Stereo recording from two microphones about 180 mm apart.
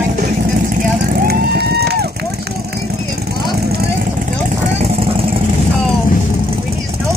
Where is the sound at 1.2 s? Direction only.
60° right (ahead or behind).